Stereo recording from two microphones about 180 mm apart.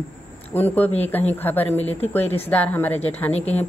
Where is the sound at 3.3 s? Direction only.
35° left (ahead or behind).